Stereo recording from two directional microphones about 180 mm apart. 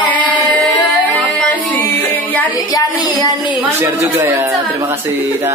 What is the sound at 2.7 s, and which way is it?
Speech, 20° left (ahead or behind).